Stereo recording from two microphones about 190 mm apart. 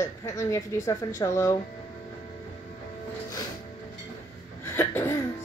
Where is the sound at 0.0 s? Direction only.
15° left (ahead or behind).